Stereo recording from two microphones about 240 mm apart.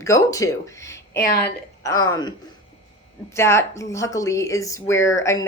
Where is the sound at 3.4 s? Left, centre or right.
Centre.